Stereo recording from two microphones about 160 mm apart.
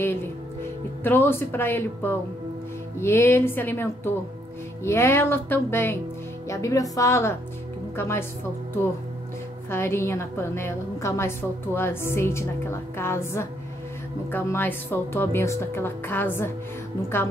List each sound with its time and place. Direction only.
0.0 s a woman's voice: 15° left (ahead or behind)
9.7 s a woman's voice: 15° left (ahead or behind)